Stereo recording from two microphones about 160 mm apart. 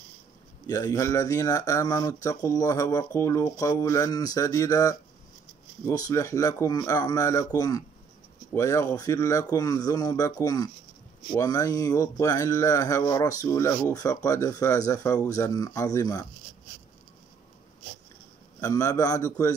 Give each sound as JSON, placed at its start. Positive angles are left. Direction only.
{"t": 0.7, "sound": "speech", "side_deg": 20}
{"t": 18.6, "sound": "speech", "side_deg": 20}